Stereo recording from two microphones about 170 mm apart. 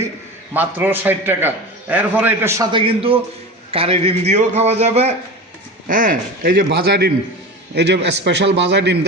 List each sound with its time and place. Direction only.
0.5 s a man's voice: 10° right (ahead or behind)
2.7 s a man's voice: 35° right (ahead or behind)
5.9 s speech: 55° right (ahead or behind)
7.8 s a man's voice: 90° right